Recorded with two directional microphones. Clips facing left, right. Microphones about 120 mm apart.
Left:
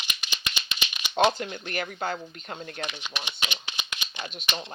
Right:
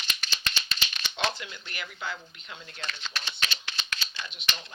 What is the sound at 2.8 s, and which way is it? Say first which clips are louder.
Speech: left 3 dB; 15° left (ahead or behind).